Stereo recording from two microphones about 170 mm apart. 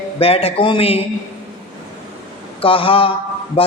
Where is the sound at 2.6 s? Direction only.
30° left (ahead or behind).